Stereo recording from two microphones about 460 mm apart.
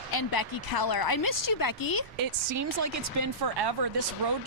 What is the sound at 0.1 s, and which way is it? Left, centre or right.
A woman's voice, left.